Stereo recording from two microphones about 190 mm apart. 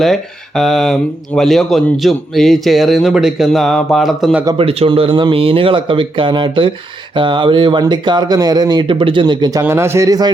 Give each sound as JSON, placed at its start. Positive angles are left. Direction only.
{"t": 0.0, "sound": "speech", "side_deg": 0}
{"t": 4.4, "sound": "speech", "side_deg": -30}